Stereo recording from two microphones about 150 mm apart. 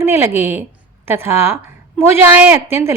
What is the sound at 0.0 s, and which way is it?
A woman's voice, 15° right (ahead or behind).